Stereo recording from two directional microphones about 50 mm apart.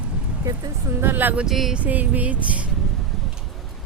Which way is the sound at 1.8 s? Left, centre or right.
Right.